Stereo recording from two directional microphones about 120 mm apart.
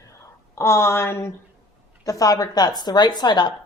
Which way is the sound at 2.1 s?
30° left (ahead or behind).